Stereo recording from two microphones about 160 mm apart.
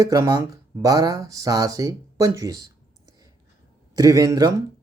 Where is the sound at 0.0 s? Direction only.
20° right (ahead or behind).